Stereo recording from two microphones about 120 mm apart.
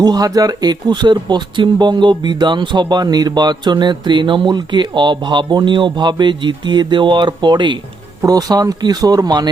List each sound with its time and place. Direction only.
0.0 s speech: 35° right (ahead or behind)